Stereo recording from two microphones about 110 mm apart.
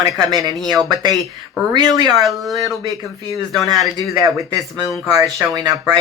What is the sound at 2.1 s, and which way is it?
Speech, centre (ahead or behind).